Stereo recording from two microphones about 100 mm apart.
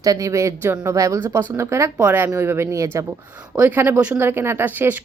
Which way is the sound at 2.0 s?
15° right (ahead or behind).